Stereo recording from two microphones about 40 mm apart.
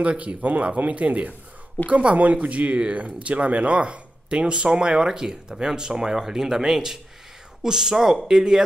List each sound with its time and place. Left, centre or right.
0.0 s speech: right; by 8.6 s centre